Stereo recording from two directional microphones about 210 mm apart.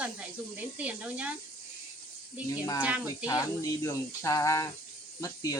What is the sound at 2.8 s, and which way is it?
Speech, 5° right (ahead or behind).